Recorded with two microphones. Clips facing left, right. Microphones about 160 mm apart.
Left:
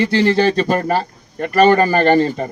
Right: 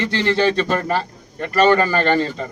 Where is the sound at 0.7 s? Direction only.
35° left (ahead or behind).